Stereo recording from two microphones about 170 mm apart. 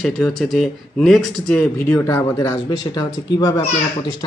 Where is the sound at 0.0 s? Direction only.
Centre (ahead or behind); by 3.1 s 20° left (ahead or behind).